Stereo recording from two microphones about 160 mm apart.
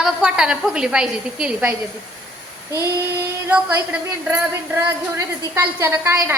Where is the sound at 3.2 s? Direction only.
15° right (ahead or behind).